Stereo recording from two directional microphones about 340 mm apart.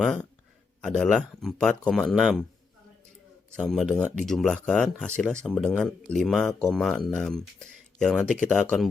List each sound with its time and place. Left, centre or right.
0.0 s speech: centre
3.5 s speech: centre